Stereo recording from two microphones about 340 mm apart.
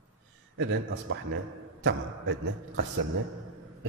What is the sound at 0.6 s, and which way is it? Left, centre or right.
A man's voice, right.